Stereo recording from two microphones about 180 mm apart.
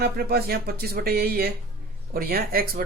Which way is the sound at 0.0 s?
60° right (ahead or behind).